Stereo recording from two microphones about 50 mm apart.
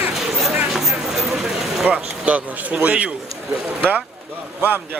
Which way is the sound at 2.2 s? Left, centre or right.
Right.